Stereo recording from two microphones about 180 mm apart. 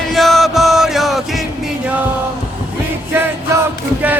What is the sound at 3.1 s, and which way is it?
Music, 15° right (ahead or behind).